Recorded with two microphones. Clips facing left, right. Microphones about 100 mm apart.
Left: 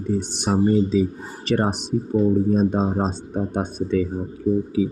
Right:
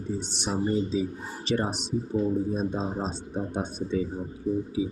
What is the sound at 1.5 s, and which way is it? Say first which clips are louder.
Speech: left 6 dB; 50° left (ahead or behind).